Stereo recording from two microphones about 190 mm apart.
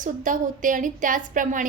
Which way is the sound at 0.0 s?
45° right (ahead or behind).